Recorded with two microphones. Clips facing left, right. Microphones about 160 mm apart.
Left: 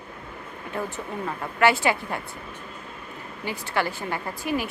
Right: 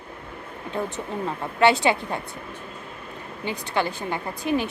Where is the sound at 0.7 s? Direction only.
20° right (ahead or behind).